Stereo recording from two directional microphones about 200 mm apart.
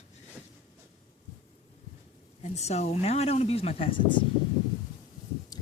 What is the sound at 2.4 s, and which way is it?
Speech, 35° left (ahead or behind).